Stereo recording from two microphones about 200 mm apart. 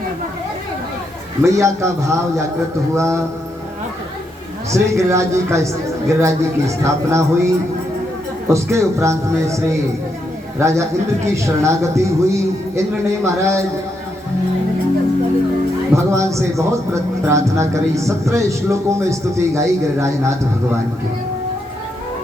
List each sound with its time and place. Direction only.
1.4 s speech: 15° right (ahead or behind)
4.7 s speech: 15° right (ahead or behind)
16.0 s speech: 15° right (ahead or behind)